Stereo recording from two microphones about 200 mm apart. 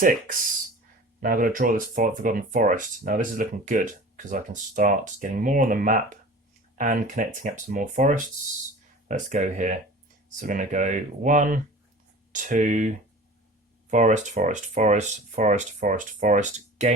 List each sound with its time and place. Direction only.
0.0 s speech: 45° right (ahead or behind)
13.9 s speech: 35° right (ahead or behind)